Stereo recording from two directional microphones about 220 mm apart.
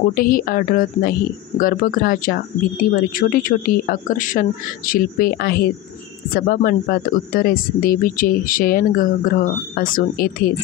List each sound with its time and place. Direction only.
0.1 s speech: 40° left (ahead or behind)